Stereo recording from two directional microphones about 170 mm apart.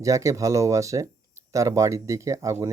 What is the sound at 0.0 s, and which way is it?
Speech, 20° right (ahead or behind).